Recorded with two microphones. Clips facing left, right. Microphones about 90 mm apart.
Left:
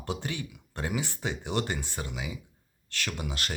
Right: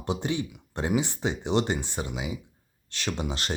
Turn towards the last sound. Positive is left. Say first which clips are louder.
# right 4 dB
turn(degrees=-25)  # may be behind; listen again after turning